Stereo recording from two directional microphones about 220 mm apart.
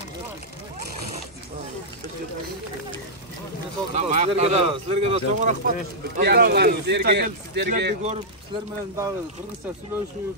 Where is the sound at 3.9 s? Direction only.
30° right (ahead or behind).